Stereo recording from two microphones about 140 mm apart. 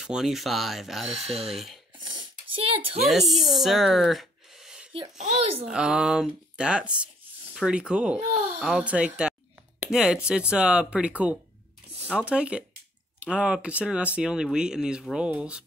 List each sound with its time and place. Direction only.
0.0 s speech: 5° right (ahead or behind)
1.1 s speech: 45° right (ahead or behind)
2.0 s a sound: 35° right (ahead or behind)
3.1 s speech: centre (ahead or behind)
5.1 s speech: 50° right (ahead or behind)
5.7 s speech: 5° right (ahead or behind)